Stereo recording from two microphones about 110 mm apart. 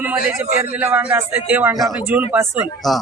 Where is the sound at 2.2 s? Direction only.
25° right (ahead or behind).